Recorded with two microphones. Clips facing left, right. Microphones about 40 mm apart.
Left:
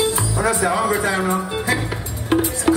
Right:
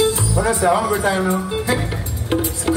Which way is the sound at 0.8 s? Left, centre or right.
Left.